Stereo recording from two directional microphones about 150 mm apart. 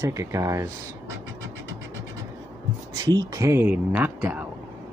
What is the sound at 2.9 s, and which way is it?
Speech, 25° right (ahead or behind).